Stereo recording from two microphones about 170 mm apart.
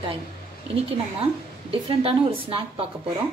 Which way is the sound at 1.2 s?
35° right (ahead or behind).